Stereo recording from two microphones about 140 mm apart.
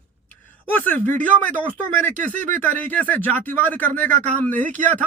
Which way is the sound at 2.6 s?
15° left (ahead or behind).